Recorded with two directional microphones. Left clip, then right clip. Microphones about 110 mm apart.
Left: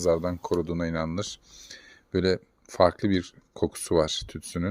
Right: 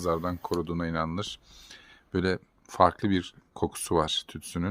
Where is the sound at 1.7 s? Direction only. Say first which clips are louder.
Left 3 dB; 5° left (ahead or behind).